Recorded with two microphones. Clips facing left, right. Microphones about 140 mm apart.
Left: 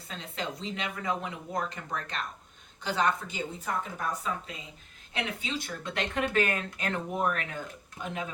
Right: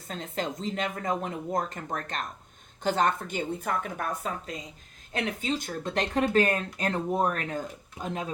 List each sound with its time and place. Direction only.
0.1 s speech: 45° right (ahead or behind)